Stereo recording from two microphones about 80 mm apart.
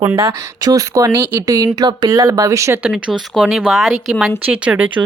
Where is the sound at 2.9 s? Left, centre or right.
Centre.